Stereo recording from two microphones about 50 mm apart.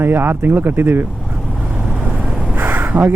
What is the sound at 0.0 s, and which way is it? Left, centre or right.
Speech, right.